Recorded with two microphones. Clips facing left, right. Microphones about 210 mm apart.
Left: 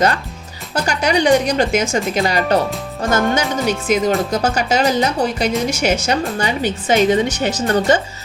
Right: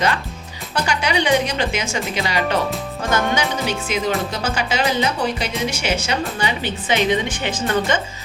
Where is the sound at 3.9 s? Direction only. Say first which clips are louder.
Left 7 dB; 45° left (ahead or behind).